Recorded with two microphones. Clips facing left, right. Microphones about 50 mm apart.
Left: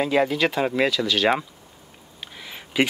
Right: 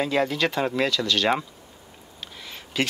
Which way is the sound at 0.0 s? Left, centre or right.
Centre.